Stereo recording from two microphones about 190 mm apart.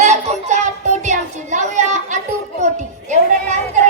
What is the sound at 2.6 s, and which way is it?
Children playing, 40° right (ahead or behind).